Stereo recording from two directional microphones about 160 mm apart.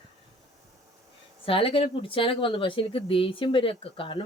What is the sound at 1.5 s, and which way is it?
A woman's voice, 35° left (ahead or behind).